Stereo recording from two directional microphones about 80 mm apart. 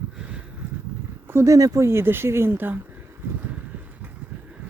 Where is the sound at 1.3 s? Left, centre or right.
Right.